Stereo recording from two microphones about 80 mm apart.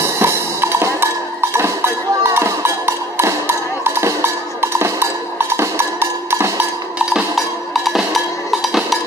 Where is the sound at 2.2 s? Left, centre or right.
Right.